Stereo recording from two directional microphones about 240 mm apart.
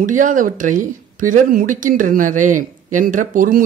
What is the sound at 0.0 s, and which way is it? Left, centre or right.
Speech, right.